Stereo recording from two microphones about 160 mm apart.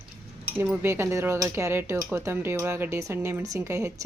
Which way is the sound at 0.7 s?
15° right (ahead or behind).